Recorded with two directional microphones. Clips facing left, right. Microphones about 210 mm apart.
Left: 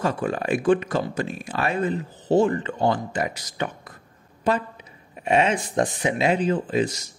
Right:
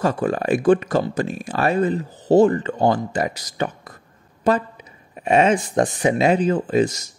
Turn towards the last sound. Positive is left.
turn(degrees=-45)  # may be behind; listen again after turning